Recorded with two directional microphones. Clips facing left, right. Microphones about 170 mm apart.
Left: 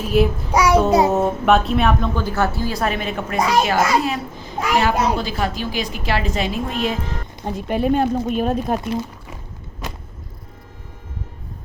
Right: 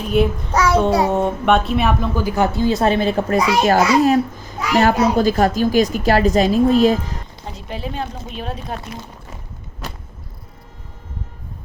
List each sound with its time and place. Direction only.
0.0 s child singing: 5° left (ahead or behind); by 1.1 s 20° left (ahead or behind)
1.1 s a woman's voice: centre (ahead or behind); by 7.0 s 40° right (ahead or behind)
7.4 s speech: 55° left (ahead or behind)